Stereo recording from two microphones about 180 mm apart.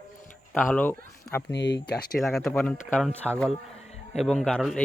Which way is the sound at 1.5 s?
75° left (ahead or behind).